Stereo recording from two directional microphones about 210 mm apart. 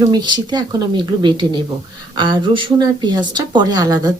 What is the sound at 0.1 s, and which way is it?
Speech, 20° right (ahead or behind).